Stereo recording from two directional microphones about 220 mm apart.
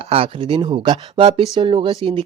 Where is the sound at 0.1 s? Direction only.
25° right (ahead or behind).